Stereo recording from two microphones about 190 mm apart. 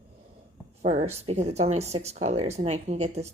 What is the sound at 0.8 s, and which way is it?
Speech, 35° right (ahead or behind).